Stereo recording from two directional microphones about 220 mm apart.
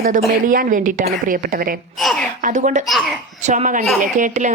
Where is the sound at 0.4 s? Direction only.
40° right (ahead or behind).